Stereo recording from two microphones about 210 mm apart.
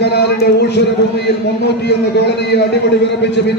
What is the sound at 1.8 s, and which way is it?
Speech, 55° left (ahead or behind).